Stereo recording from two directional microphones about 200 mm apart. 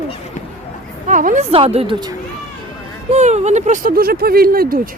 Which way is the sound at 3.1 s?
35° right (ahead or behind).